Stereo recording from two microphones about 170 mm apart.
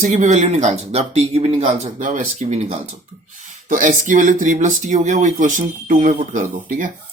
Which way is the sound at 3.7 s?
50° right (ahead or behind).